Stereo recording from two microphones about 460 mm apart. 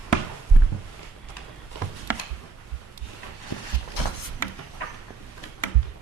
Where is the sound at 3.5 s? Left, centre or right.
Left.